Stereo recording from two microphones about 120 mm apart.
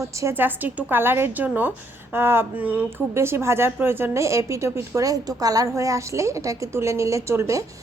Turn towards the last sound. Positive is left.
turn(degrees=-25)  # may be behind; listen again after turning